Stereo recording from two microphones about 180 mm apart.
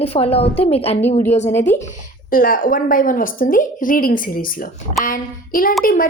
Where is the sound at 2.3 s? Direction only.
50° left (ahead or behind).